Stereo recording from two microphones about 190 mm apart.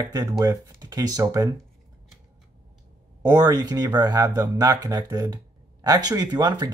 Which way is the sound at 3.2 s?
20° right (ahead or behind).